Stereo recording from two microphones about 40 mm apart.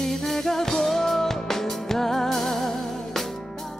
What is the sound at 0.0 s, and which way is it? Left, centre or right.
Music, centre.